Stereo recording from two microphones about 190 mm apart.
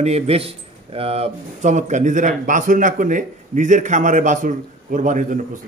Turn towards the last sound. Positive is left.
turn(degrees=-40)  # may be behind; listen again after turning